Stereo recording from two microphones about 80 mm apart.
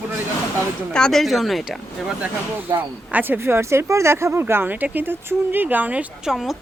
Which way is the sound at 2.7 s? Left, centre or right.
Right.